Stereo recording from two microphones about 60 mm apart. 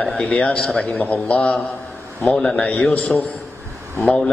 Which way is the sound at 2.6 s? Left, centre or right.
Left.